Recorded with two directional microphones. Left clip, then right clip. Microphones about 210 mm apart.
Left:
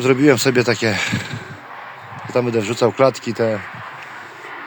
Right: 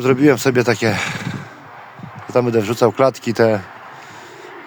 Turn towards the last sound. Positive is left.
turn(degrees=-35)  # may be behind; listen again after turning